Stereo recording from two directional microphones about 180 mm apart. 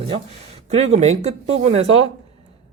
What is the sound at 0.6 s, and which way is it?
Speech, 35° right (ahead or behind).